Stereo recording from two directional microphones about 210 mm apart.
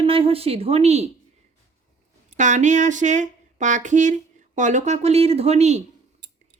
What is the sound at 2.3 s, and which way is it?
Speech, 35° right (ahead or behind).